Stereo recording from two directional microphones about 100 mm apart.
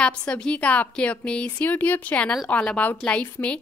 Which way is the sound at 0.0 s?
10° left (ahead or behind).